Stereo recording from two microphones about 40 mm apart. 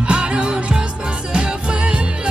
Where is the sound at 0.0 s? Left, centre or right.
Right.